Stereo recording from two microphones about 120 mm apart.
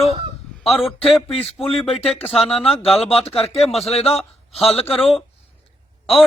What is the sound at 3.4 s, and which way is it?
Speech, 55° left (ahead or behind).